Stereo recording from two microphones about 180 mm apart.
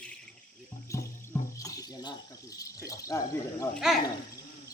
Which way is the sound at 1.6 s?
20° left (ahead or behind).